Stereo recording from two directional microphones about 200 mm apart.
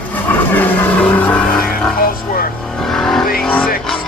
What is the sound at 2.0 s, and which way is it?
Vehicle, 45° left (ahead or behind).